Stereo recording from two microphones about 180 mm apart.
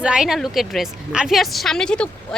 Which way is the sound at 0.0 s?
5° right (ahead or behind).